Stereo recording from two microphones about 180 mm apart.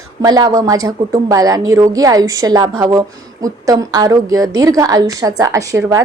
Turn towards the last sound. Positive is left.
turn(degrees=-15)  # may be behind; listen again after turning